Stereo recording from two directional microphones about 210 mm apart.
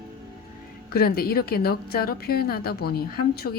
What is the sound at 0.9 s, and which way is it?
Speech, 45° left (ahead or behind).